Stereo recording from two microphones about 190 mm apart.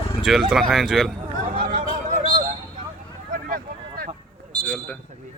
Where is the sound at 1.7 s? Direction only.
45° right (ahead or behind).